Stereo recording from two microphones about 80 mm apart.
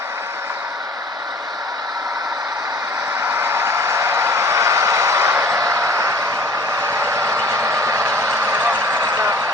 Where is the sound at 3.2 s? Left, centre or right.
Right.